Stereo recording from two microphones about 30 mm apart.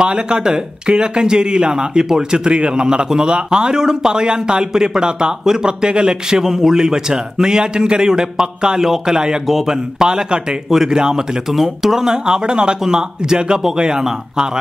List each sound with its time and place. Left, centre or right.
0.0 s a man's voice: right
5.7 s speech: right
6.4 s speech: centre
9.1 s speech: right
9.5 s a man's voice: centre
9.9 s speech: right
11.5 s speech: centre